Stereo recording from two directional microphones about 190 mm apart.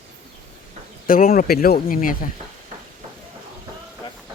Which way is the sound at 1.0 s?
50° left (ahead or behind).